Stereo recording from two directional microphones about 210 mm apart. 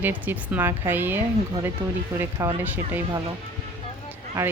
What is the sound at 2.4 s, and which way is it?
Speech, 15° right (ahead or behind).